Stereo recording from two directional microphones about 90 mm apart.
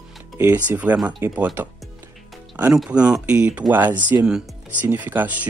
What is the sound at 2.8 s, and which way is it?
Speech, 10° right (ahead or behind).